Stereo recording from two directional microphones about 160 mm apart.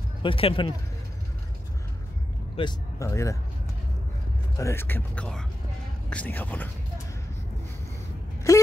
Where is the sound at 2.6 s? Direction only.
25° left (ahead or behind).